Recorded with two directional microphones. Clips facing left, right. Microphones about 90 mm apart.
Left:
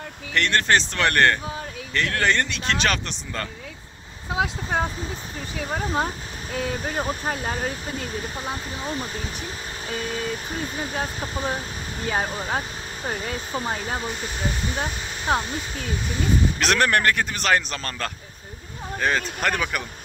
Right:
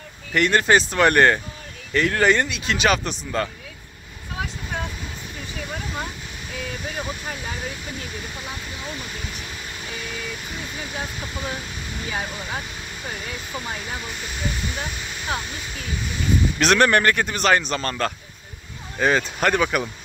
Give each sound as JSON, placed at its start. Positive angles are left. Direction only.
{"t": 0.3, "sound": "a man's voice", "side_deg": -10}
{"t": 5.7, "sound": "speech", "side_deg": 35}
{"t": 16.5, "sound": "a man's voice", "side_deg": 0}